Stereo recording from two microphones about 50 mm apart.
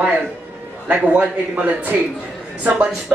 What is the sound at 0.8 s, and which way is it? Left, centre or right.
A man's voice, right.